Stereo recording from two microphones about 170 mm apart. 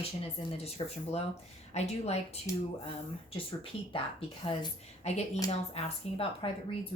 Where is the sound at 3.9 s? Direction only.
30° left (ahead or behind).